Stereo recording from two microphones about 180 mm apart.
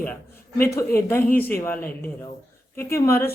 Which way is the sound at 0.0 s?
10° left (ahead or behind).